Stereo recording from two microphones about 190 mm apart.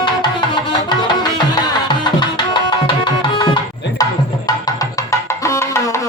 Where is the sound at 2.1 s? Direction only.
25° left (ahead or behind).